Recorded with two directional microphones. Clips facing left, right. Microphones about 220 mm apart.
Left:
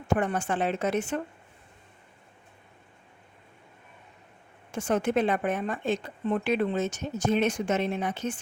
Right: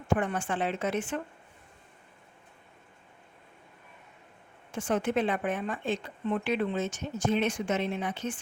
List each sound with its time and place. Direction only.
0.1 s a woman's voice: 40° left (ahead or behind)
4.7 s speech: 40° left (ahead or behind)